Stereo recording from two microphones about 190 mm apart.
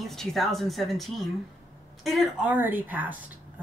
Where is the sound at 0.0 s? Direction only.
Centre (ahead or behind).